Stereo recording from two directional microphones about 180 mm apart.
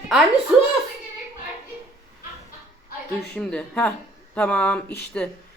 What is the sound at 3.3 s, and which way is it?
Speech, 5° left (ahead or behind).